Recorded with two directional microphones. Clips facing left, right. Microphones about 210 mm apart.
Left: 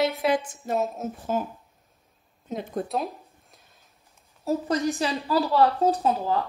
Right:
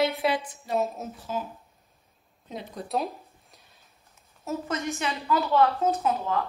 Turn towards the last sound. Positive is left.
turn(degrees=35)  # may be behind; listen again after turning